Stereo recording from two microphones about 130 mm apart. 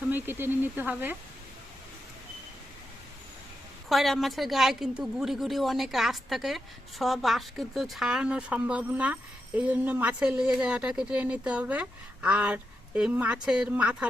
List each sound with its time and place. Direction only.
0.1 s a woman's voice: 15° right (ahead or behind)
3.8 s a woman's voice: centre (ahead or behind)